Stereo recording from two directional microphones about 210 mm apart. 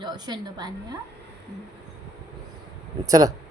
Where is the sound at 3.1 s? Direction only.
15° right (ahead or behind).